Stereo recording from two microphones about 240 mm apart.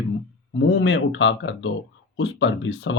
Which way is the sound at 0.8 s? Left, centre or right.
Left.